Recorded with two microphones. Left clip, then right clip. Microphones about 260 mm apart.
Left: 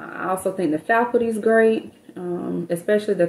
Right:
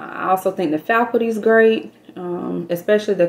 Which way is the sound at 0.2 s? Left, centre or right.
Centre.